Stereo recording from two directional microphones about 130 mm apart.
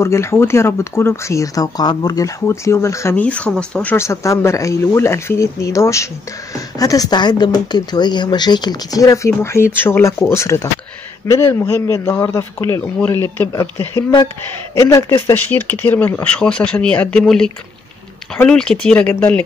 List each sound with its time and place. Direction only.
0.0 s speech: 20° left (ahead or behind)
3.2 s speech: 10° left (ahead or behind)
4.0 s speech: 25° left (ahead or behind)